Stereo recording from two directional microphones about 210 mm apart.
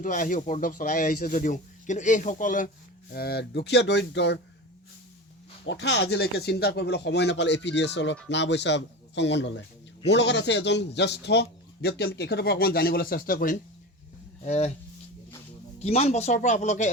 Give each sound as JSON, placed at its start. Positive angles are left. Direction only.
{"t": 0.0, "sound": "a man's voice", "side_deg": 40}
{"t": 5.6, "sound": "a man's voice", "side_deg": 55}
{"t": 15.8, "sound": "speech", "side_deg": 30}